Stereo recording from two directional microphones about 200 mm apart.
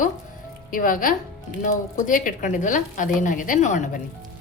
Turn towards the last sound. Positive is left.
turn(degrees=40)  # may be behind; listen again after turning